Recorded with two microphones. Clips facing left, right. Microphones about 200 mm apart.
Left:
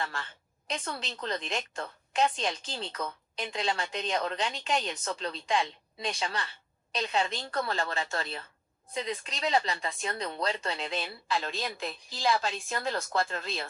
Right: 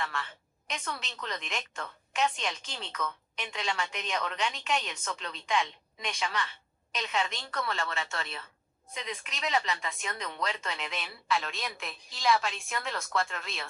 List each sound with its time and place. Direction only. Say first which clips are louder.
0.0 s a woman's voice: even; 30° left (ahead or behind)